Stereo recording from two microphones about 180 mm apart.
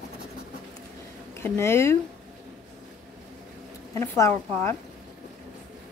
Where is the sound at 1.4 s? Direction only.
15° left (ahead or behind).